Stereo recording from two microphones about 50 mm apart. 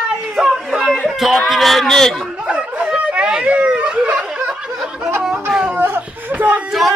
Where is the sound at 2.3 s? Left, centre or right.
Right.